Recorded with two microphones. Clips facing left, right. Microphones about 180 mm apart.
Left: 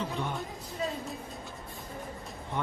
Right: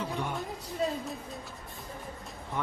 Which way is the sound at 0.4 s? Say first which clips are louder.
Right 3 dB; centre (ahead or behind).